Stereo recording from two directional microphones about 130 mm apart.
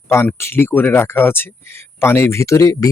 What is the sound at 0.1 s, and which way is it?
Speech, 20° left (ahead or behind).